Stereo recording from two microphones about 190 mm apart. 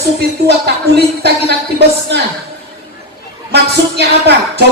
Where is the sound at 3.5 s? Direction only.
60° right (ahead or behind).